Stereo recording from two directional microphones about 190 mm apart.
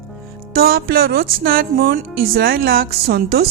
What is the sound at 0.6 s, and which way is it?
A woman's voice, 55° right (ahead or behind).